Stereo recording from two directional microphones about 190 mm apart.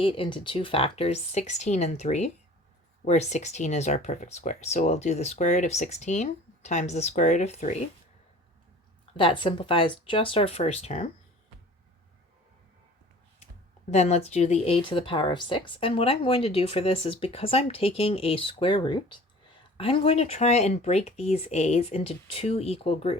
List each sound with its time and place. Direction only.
0.0 s speech: 25° left (ahead or behind)
9.1 s speech: 25° left (ahead or behind)
13.9 s speech: 35° left (ahead or behind)